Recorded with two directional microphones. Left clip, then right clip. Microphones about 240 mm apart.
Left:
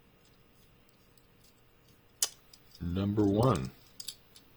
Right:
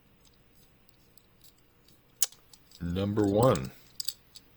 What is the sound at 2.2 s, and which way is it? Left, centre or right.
Tick-tock, right.